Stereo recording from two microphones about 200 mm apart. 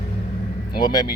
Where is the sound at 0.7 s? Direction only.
20° left (ahead or behind).